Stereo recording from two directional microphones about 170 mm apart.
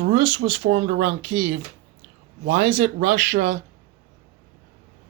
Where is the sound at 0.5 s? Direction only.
90° right; by 1.5 s 50° right (ahead or behind).